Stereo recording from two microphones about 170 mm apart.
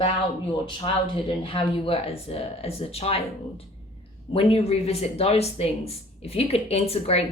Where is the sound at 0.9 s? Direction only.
35° left (ahead or behind).